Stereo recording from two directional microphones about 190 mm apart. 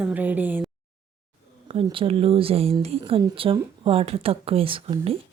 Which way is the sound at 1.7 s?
30° right (ahead or behind).